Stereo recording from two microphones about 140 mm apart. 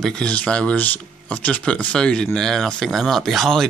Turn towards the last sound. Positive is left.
turn(degrees=0)  # may be behind; listen again after turning